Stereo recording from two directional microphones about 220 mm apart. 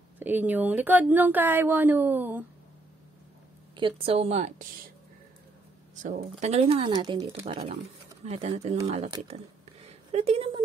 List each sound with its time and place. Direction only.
0.2 s speech: 10° right (ahead or behind)
3.7 s speech: 25° right (ahead or behind)
6.0 s speech: 35° right (ahead or behind)
9.8 s a sound: 30° right (ahead or behind)